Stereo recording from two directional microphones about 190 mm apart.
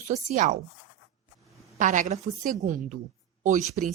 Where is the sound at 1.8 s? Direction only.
40° right (ahead or behind).